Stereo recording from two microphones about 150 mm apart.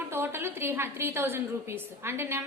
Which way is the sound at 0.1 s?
15° right (ahead or behind).